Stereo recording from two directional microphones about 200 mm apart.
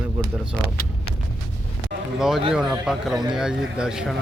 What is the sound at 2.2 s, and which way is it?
Speech, centre (ahead or behind).